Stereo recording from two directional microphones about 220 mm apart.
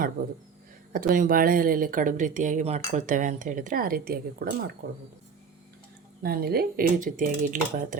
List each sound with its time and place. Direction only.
0.9 s speech: 40° right (ahead or behind)
6.2 s speech: 45° right (ahead or behind)